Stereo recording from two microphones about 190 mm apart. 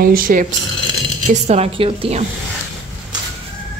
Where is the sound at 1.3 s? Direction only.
35° right (ahead or behind).